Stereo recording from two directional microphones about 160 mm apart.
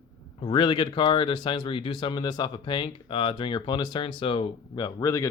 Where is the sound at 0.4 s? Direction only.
30° left (ahead or behind).